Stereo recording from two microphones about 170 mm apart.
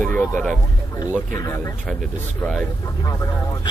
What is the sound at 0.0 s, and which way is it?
Speech, 10° left (ahead or behind).